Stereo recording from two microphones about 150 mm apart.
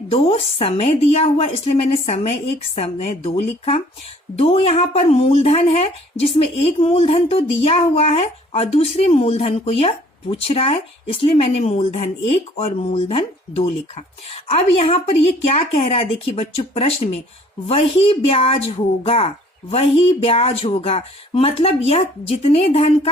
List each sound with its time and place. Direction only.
0.1 s a woman's voice: 40° left (ahead or behind)